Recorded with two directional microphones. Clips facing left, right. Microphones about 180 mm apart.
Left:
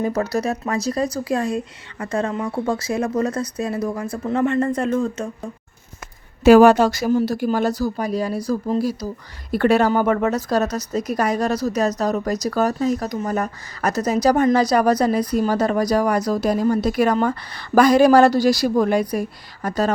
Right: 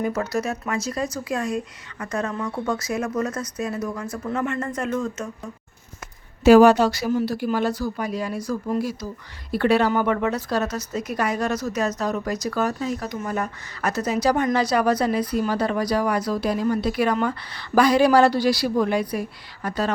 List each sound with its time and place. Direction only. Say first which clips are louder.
0.0 s speech: left 3 dB; 35° left (ahead or behind)
6.4 s speech: left 2 dB; 55° left (ahead or behind); by 9.0 s 35° left (ahead or behind)
9.5 s speech: left 3 dB; 50° left (ahead or behind)